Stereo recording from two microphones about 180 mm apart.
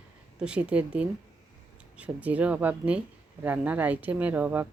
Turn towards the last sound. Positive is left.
turn(degrees=-10)  # may be behind; listen again after turning